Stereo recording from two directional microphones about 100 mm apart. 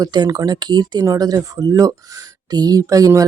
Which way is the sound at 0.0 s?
40° right (ahead or behind).